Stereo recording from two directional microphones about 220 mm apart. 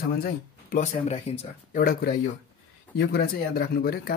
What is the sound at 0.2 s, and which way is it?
Speech, 35° left (ahead or behind).